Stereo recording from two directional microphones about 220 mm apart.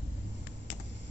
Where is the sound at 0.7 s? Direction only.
50° left (ahead or behind).